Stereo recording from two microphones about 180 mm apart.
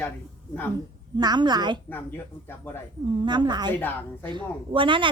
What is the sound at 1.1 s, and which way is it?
Speech, 25° right (ahead or behind).